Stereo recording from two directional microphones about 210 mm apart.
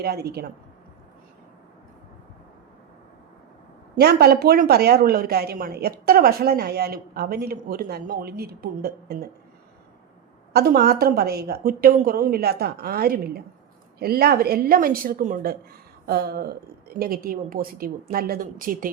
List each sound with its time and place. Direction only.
0.0 s a woman's voice: 50° right (ahead or behind)
3.9 s a woman's voice: 50° right (ahead or behind)
10.5 s a woman's voice: 45° right (ahead or behind)